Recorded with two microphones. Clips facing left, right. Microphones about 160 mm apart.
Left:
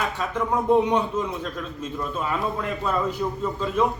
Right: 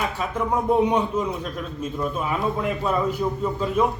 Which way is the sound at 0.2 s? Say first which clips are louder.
Right 1 dB; 10° right (ahead or behind).